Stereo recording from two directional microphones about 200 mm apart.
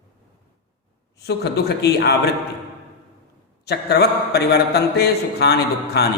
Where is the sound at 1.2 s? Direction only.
55° left (ahead or behind).